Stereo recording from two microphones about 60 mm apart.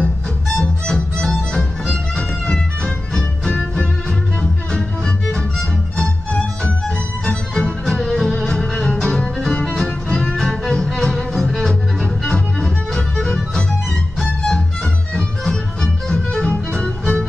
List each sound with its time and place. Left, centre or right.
0.6 s music: centre